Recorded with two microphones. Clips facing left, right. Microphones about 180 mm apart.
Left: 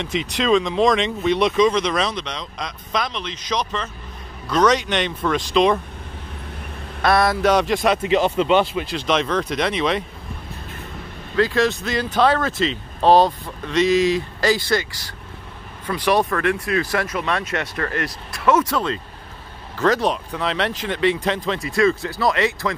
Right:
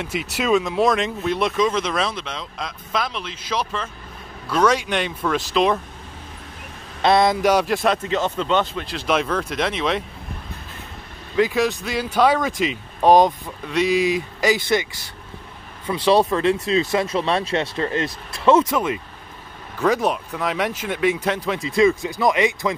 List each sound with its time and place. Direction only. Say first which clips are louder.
0.0 s speech: left 2 dB; 5° right (ahead or behind)
7.0 s a sound: right 1 dB; 20° right (ahead or behind)
7.4 s speech: left 1 dB; 5° right (ahead or behind)
7.9 s speech: left 4 dB; 10° left (ahead or behind)
8.8 s speech: left 1 dB; 5° right (ahead or behind)
11.3 s speech: even; 15° right (ahead or behind)
15.9 s speech: right 2 dB; 25° right (ahead or behind); by 21.4 s 10° right (ahead or behind)
21.5 s speech: right 3 dB; 20° right (ahead or behind)